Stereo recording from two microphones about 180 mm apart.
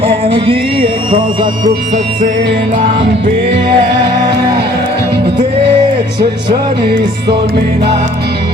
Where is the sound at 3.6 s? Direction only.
25° right (ahead or behind).